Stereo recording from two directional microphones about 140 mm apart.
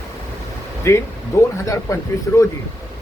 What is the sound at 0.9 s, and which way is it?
A man's voice, 20° left (ahead or behind).